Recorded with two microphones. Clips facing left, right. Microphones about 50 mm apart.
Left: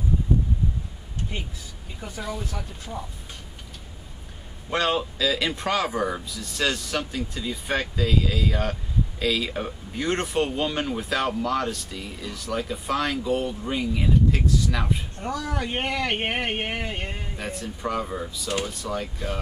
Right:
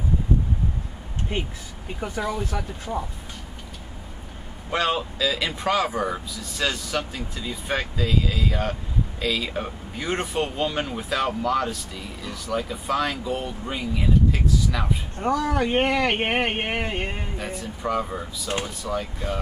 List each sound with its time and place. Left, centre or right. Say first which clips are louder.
2.0 s speech: right 7 dB; right
4.6 s speech: even; centre
15.1 s speech: right 6 dB; right
17.4 s speech: even; centre